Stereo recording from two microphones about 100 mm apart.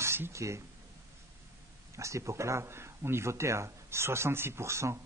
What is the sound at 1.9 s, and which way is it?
A man's voice, 30° right (ahead or behind).